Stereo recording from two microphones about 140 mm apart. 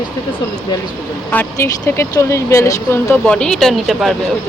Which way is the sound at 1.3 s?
15° left (ahead or behind).